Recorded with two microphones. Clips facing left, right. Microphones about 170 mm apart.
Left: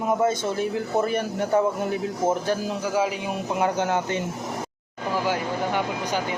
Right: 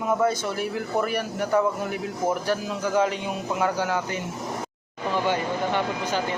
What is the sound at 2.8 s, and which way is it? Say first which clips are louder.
Speech: right 1 dB; 10° left (ahead or behind).